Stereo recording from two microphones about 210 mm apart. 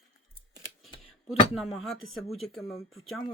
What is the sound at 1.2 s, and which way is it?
Speech, centre (ahead or behind).